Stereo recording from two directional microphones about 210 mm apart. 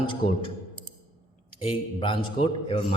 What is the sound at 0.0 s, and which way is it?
Speech, 25° left (ahead or behind).